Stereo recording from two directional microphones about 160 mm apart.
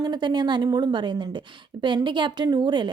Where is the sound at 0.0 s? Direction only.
25° right (ahead or behind).